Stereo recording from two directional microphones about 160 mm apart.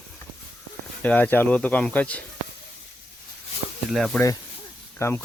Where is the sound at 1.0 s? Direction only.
10° left (ahead or behind).